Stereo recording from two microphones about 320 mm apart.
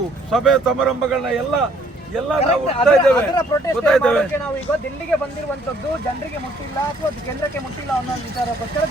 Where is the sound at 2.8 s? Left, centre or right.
Centre.